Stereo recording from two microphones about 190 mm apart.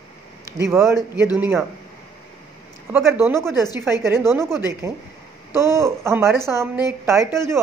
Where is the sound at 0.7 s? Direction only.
15° right (ahead or behind).